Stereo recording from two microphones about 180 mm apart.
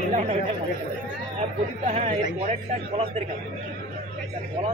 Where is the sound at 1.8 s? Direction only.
40° right (ahead or behind).